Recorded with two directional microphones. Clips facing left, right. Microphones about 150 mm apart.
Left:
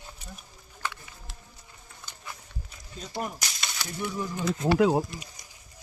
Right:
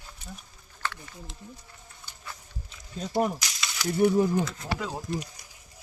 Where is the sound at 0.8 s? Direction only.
15° left (ahead or behind).